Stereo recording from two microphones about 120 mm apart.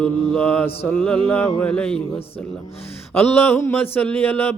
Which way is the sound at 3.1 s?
15° left (ahead or behind).